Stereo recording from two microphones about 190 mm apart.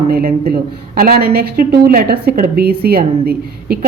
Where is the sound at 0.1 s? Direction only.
50° right (ahead or behind).